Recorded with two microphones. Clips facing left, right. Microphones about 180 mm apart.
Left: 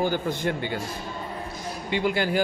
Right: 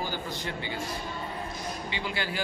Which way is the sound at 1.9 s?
50° left (ahead or behind).